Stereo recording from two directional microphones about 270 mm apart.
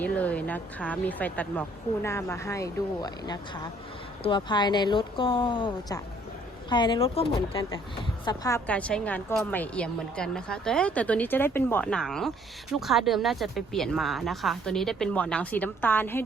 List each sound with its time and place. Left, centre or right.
0.0 s a woman's voice: centre